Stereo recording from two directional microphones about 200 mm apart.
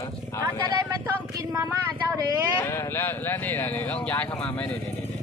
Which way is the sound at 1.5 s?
15° right (ahead or behind).